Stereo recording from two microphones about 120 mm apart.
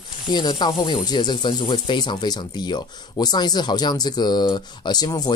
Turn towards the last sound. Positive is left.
turn(degrees=35)  # may be behind; listen again after turning